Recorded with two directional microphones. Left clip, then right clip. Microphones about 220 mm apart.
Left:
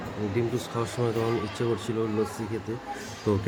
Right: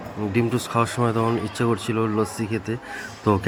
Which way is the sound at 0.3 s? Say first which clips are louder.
Right 8 dB; 20° right (ahead or behind).